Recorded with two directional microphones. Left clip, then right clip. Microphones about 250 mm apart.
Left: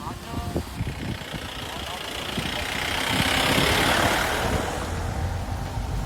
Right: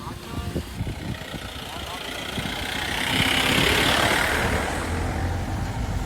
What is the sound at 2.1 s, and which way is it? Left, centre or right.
Vehicle, left.